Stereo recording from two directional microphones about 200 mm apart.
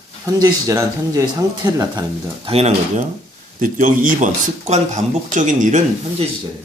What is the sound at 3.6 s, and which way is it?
Speech, 40° right (ahead or behind).